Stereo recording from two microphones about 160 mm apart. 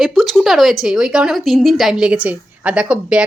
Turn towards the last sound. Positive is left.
turn(degrees=-5)  # may be behind; listen again after turning